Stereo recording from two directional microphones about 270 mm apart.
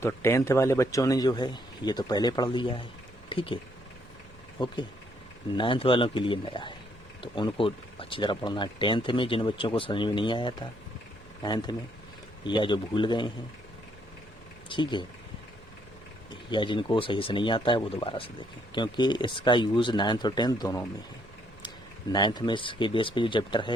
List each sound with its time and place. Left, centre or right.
0.0 s speech: centre
4.6 s speech: centre
14.7 s speech: centre
16.3 s speech: centre
22.1 s speech: centre